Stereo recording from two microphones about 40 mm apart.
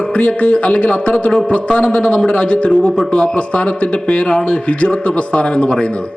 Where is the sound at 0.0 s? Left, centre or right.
Left.